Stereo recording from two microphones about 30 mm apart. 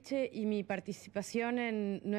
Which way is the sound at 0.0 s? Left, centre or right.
Centre.